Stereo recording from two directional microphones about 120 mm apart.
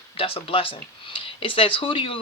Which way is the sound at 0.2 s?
50° left (ahead or behind).